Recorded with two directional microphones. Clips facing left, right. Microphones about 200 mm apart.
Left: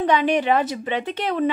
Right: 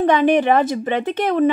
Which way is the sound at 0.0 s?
50° right (ahead or behind).